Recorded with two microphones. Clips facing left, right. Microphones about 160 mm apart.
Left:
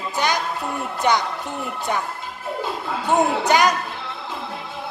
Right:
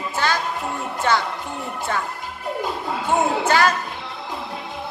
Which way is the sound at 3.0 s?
15° left (ahead or behind).